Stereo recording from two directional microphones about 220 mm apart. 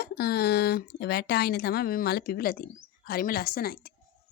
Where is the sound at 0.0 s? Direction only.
45° left (ahead or behind).